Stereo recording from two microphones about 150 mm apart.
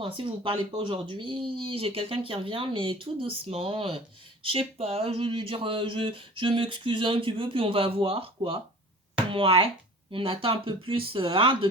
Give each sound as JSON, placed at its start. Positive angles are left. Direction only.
{"t": 0.0, "sound": "speech", "side_deg": -35}